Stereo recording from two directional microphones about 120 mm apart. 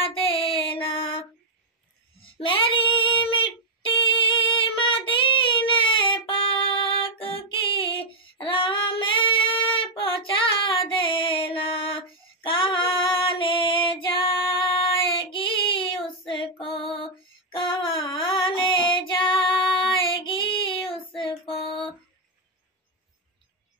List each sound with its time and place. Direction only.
0.5 s a sound: 50° left (ahead or behind)
2.2 s female singing: 45° left (ahead or behind)
15.3 s child singing: 45° left (ahead or behind)
18.1 s music: 45° left (ahead or behind)